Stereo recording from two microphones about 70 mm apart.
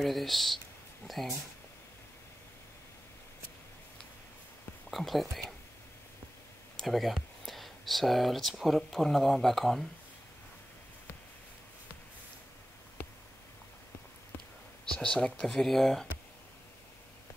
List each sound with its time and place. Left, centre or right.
0.0 s speech: centre
4.9 s speech: centre
6.8 s speech: centre
13.0 s a sound: left
14.9 s speech: centre